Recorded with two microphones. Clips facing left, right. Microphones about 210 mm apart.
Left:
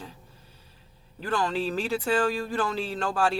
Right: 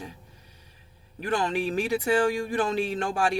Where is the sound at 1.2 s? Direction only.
15° right (ahead or behind).